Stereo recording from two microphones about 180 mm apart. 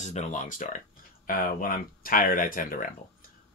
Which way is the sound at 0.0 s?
40° left (ahead or behind).